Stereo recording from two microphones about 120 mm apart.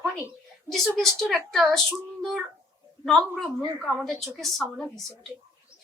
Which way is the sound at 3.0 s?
5° left (ahead or behind).